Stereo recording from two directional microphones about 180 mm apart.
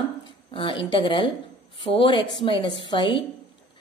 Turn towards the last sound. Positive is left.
turn(degrees=25)  # may be behind; listen again after turning